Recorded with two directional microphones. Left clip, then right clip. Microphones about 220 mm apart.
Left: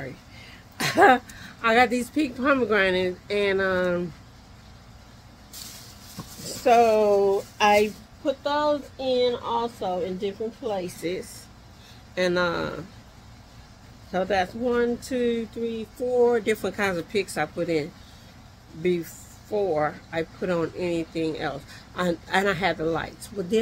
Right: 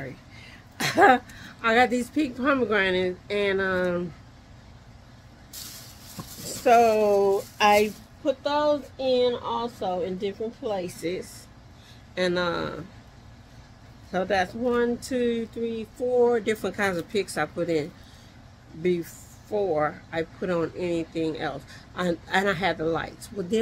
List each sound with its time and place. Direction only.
0.7 s speech: 5° left (ahead or behind)
6.2 s a sound: 15° right (ahead or behind)
6.6 s speech: centre (ahead or behind)
14.1 s speech: centre (ahead or behind)